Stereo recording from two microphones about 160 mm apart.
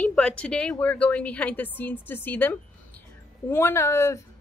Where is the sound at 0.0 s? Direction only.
10° left (ahead or behind).